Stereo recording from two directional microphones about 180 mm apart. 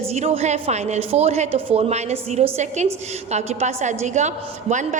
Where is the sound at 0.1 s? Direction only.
40° right (ahead or behind).